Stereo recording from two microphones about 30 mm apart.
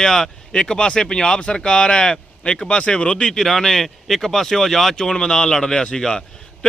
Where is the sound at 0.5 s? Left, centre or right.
Left.